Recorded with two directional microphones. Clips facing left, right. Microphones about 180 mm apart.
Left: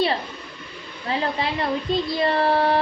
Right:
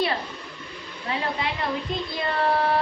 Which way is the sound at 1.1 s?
30° left (ahead or behind).